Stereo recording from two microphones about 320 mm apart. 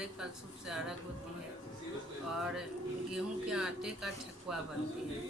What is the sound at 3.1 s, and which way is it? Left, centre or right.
Speech, centre.